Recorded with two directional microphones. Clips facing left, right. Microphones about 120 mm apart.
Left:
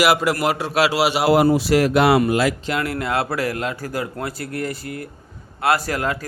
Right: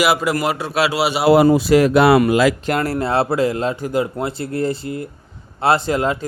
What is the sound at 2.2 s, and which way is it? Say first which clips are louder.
Speech: right 4 dB; 90° right.